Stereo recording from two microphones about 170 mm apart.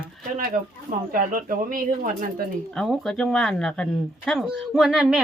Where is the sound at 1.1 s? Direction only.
55° right (ahead or behind).